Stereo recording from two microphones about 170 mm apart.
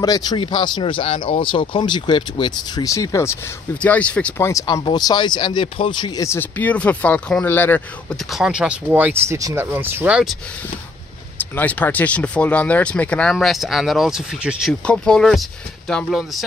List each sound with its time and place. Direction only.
0.0 s speech: 25° left (ahead or behind); by 4.5 s 5° left (ahead or behind)
4.5 s speech: 20° left (ahead or behind)
8.3 s speech: 5° right (ahead or behind)
11.5 s speech: 10° left (ahead or behind)